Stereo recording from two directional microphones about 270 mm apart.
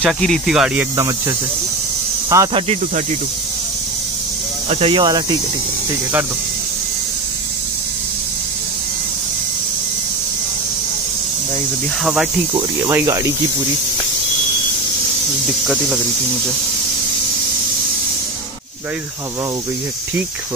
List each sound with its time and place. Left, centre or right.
0.0 s speech: centre
0.9 s speech: centre
4.6 s speech: right
12.0 s speech: centre
15.6 s speech: centre